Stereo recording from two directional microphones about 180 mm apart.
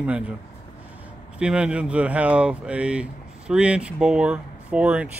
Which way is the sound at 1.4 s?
5° right (ahead or behind).